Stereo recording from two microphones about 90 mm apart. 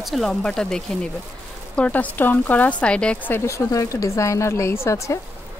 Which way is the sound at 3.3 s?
35° left (ahead or behind).